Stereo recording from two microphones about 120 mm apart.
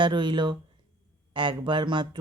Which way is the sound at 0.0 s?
40° right (ahead or behind).